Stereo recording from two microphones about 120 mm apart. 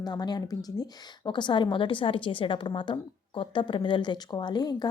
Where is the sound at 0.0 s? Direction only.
35° left (ahead or behind).